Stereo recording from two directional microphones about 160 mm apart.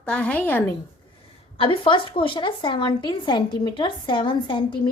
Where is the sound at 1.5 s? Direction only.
35° left (ahead or behind).